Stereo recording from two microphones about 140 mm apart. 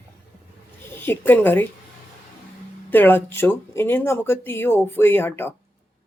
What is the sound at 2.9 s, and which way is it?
Speech, 15° left (ahead or behind).